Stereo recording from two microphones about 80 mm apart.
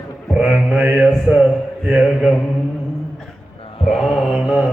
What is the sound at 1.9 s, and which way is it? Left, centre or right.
Mantra, centre.